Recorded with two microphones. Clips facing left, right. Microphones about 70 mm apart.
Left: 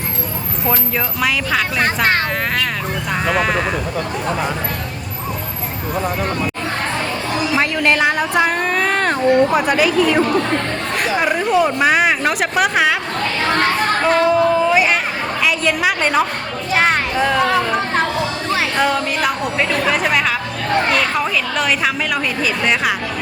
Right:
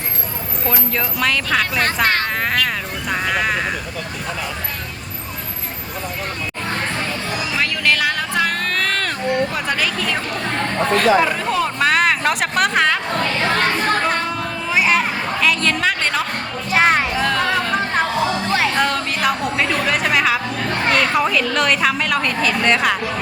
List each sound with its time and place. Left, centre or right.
0.9 s speech: centre
3.1 s speech: centre
7.5 s a sound: left
9.6 s speech: centre
13.5 s a sound: centre
16.7 s speech: centre
17.2 s speech: centre